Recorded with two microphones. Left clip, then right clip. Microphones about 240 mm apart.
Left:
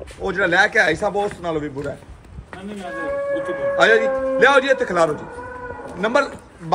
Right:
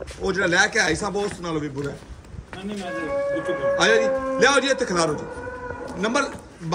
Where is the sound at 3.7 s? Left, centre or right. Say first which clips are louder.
Left 4 dB; centre.